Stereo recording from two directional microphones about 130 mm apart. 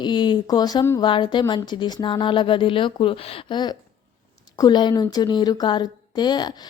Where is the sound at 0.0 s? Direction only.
35° left (ahead or behind).